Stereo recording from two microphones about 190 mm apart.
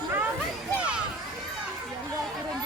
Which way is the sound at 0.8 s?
5° right (ahead or behind).